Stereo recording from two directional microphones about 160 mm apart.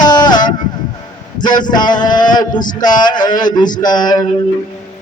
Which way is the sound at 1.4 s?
25° left (ahead or behind).